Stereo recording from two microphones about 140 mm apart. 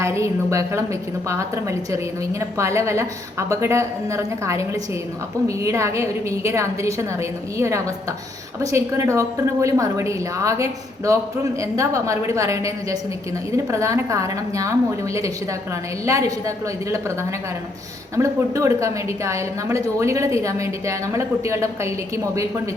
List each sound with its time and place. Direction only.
0.0 s a woman's voice: 20° right (ahead or behind)
18.2 s a woman's voice: 20° right (ahead or behind)